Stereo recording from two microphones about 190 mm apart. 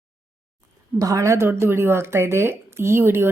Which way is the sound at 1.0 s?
15° right (ahead or behind).